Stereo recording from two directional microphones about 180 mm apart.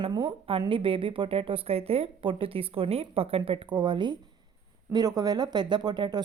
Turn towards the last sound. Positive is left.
turn(degrees=-25)  # may be behind; listen again after turning